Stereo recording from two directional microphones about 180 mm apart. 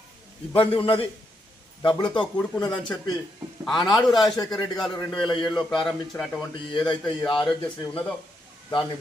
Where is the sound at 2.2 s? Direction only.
5° left (ahead or behind).